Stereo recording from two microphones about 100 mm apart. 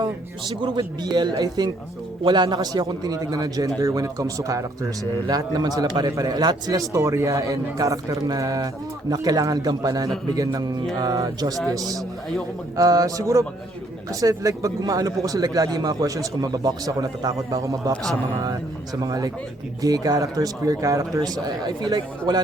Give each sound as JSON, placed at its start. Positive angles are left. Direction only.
{"t": 0.6, "sound": "a man's voice", "side_deg": -50}
{"t": 17.9, "sound": "a man's voice", "side_deg": 5}
{"t": 19.0, "sound": "a man's voice", "side_deg": -35}